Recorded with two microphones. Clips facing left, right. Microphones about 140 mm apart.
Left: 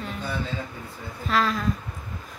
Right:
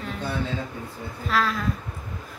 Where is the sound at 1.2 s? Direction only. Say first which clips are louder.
Left 1 dB; centre (ahead or behind).